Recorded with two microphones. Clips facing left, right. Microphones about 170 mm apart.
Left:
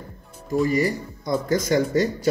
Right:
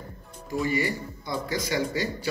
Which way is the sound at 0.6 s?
40° left (ahead or behind).